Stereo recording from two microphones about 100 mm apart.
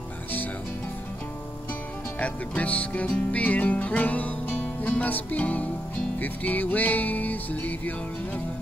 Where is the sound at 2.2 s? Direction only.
15° left (ahead or behind).